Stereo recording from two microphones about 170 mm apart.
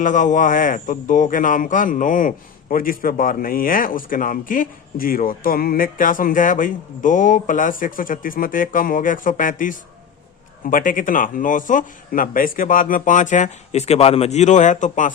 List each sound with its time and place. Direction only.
0.0 s speech: 50° left (ahead or behind)